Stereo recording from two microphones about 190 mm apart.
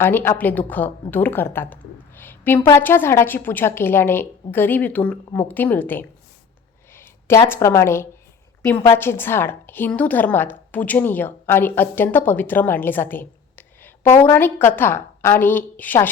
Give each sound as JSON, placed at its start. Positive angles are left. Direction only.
{"t": 0.0, "sound": "a woman's voice", "side_deg": 10}
{"t": 1.1, "sound": "a sound", "side_deg": 10}
{"t": 2.7, "sound": "a woman's voice", "side_deg": 10}